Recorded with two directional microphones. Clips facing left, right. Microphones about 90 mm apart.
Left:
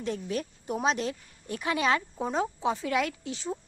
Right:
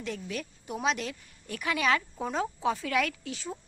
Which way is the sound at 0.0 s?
35° left (ahead or behind).